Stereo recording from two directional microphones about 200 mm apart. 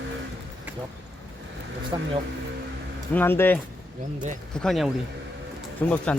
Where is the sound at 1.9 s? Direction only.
20° right (ahead or behind).